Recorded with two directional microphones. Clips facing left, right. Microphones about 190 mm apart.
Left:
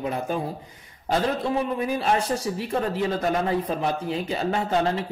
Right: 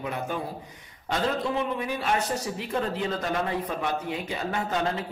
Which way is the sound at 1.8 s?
35° left (ahead or behind).